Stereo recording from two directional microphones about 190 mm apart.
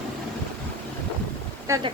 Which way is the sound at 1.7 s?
15° right (ahead or behind).